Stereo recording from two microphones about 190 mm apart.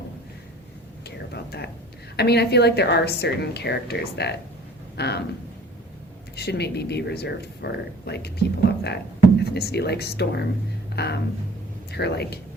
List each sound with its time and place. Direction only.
1.0 s whispering: 60° left (ahead or behind)
2.1 s speech: 60° left (ahead or behind)
6.3 s speech: 60° left (ahead or behind)